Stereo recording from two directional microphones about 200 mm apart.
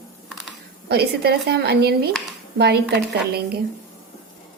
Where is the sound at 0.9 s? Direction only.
55° right (ahead or behind).